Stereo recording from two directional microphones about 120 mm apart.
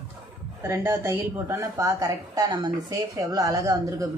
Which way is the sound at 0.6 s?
25° right (ahead or behind).